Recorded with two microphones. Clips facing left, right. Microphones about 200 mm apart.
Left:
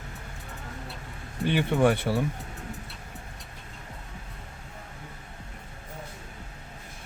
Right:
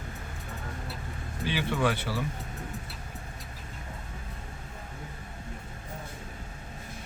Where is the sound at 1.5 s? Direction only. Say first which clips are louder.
Left 6 dB; 55° left (ahead or behind).